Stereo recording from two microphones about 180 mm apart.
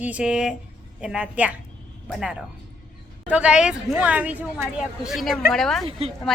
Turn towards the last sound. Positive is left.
turn(degrees=0)  # may be behind; listen again after turning